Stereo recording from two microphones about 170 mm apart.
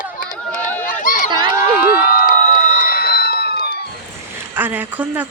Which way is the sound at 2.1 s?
50° left (ahead or behind).